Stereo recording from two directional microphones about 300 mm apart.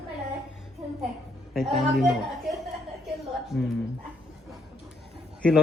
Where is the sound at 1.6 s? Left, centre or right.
Centre.